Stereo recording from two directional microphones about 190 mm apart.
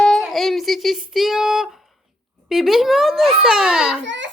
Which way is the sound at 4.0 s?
70° right (ahead or behind).